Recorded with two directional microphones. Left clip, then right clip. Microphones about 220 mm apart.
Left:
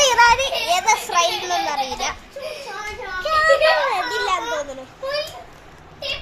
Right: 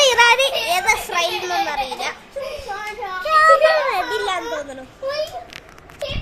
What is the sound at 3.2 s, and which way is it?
Child singing, 5° right (ahead or behind).